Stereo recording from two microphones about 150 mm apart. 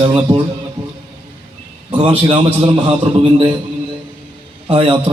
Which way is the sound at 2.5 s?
35° right (ahead or behind).